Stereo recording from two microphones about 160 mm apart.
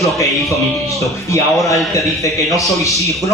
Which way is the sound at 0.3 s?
Centre (ahead or behind).